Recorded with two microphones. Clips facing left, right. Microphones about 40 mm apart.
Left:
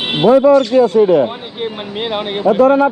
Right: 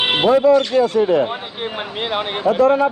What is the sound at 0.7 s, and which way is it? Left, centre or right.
Speech, left.